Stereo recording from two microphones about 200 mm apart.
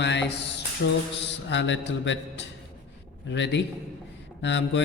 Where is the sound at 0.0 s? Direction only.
60° left (ahead or behind).